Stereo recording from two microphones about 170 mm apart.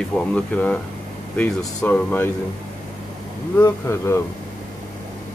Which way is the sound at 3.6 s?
15° left (ahead or behind).